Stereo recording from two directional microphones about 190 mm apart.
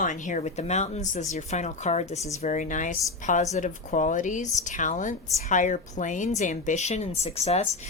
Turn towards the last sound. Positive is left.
turn(degrees=35)  # may be behind; listen again after turning